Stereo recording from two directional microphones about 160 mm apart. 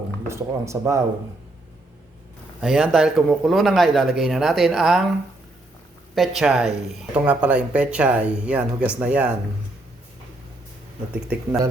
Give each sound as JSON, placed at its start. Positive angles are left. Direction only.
{"t": 0.3, "sound": "speech", "side_deg": -15}
{"t": 2.6, "sound": "a man's voice", "side_deg": -5}
{"t": 6.1, "sound": "speech", "side_deg": 0}